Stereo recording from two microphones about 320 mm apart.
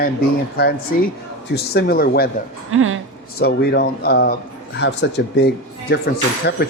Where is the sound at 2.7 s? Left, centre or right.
Right.